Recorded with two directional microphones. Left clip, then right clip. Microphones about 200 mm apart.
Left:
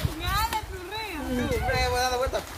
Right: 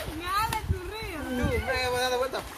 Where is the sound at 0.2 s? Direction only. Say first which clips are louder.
Even; 35° left (ahead or behind).